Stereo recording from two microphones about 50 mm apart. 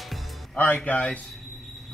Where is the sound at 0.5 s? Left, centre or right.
Left.